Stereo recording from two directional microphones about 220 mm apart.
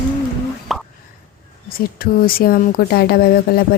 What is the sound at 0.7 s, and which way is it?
Plop, centre (ahead or behind).